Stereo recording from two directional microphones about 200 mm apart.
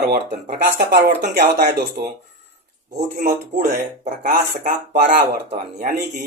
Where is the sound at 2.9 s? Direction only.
35° right (ahead or behind).